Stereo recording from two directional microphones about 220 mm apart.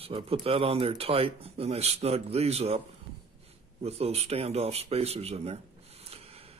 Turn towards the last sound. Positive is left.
turn(degrees=-25)  # may be behind; listen again after turning